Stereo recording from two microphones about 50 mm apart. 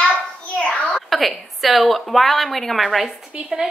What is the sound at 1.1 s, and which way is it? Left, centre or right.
A woman's voice, centre.